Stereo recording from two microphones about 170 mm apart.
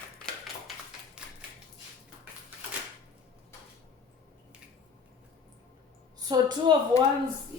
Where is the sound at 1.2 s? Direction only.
5° right (ahead or behind).